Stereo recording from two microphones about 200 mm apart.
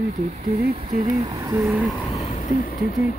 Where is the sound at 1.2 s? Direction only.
20° right (ahead or behind).